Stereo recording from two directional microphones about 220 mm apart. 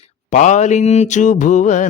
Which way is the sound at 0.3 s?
35° left (ahead or behind).